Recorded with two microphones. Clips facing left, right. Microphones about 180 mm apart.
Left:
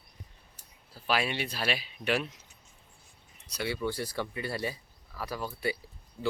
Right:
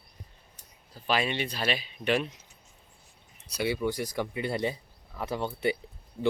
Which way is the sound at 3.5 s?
15° right (ahead or behind).